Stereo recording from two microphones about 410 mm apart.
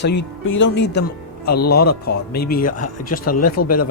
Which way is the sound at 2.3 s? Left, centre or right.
Left.